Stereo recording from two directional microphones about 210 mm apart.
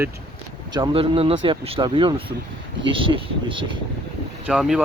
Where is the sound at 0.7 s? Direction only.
25° right (ahead or behind).